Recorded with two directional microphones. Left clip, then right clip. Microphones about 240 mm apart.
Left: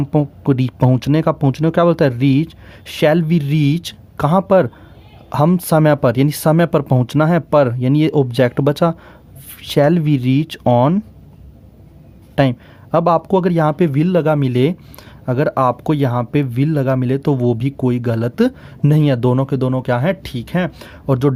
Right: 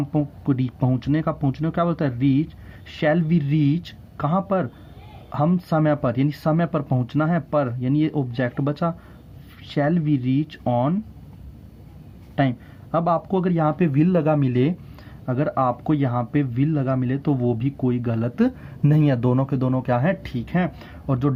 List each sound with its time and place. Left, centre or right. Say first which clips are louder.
0.0 s speech: left 7 dB; left
12.4 s speech: left 7 dB; left